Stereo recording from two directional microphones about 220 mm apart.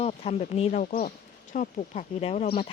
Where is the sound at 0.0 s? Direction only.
30° left (ahead or behind).